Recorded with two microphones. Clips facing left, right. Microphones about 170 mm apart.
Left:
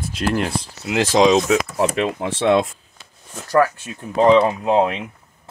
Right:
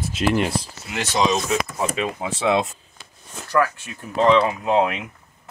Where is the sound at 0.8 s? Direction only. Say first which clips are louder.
Left 7 dB; 90° left; by 2.2 s 75° left (ahead or behind).